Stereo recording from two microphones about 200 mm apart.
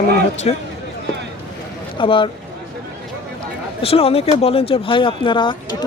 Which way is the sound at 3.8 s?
30° left (ahead or behind).